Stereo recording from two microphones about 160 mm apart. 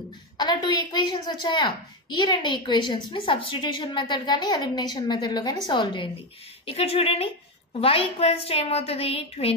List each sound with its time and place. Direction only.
0.4 s a woman's voice: 25° left (ahead or behind)